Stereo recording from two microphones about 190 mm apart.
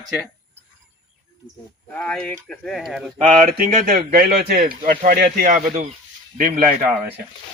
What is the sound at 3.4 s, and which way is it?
Speech, 45° right (ahead or behind).